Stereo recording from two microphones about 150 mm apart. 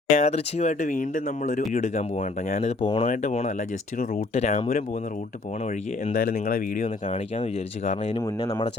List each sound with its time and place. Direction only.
0.1 s speech: 50° left (ahead or behind)
6.1 s speech: 60° left (ahead or behind)